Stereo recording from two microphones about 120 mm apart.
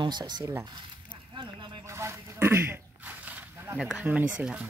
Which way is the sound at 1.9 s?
25° right (ahead or behind).